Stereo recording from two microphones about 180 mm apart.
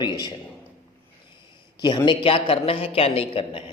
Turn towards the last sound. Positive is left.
turn(degrees=30)  # may be behind; listen again after turning